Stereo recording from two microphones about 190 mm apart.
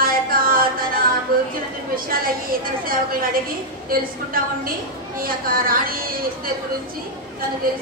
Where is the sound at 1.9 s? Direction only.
50° right (ahead or behind).